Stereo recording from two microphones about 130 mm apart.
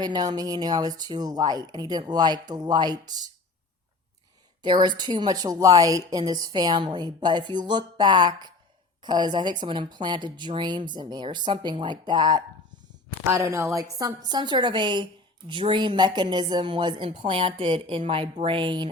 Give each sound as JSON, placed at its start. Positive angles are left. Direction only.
{"t": 0.0, "sound": "a woman's voice", "side_deg": -30}
{"t": 4.6, "sound": "a woman's voice", "side_deg": -35}
{"t": 13.2, "sound": "a woman's voice", "side_deg": -25}